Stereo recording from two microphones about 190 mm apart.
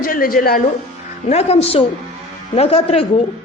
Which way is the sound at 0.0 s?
50° left (ahead or behind).